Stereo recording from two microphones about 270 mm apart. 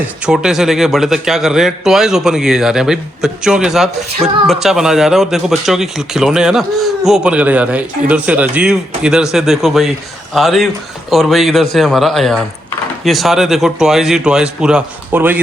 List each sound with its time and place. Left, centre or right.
0.0 s a man's voice: centre